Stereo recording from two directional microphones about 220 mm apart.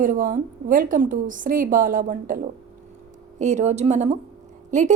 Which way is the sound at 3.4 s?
30° right (ahead or behind).